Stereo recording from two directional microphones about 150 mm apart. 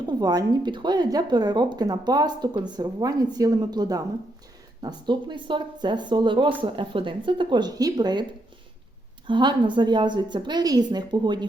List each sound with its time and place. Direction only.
0.1 s a woman's voice: 25° right (ahead or behind)
9.2 s a woman's voice: 30° right (ahead or behind)